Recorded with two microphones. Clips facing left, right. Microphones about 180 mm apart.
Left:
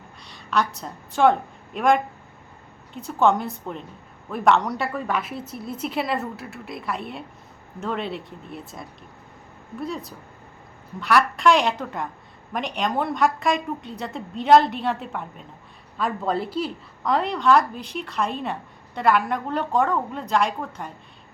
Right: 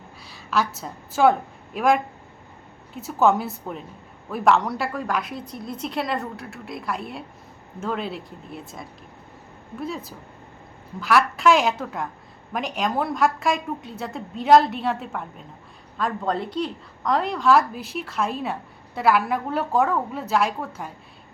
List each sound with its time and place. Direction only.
0.3 s a woman's voice: 5° right (ahead or behind)